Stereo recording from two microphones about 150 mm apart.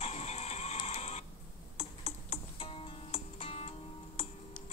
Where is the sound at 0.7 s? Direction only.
45° left (ahead or behind).